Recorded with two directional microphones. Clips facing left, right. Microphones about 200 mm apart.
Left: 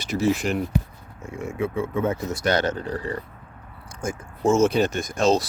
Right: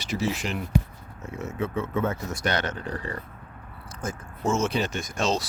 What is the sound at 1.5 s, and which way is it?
Speech, 10° left (ahead or behind).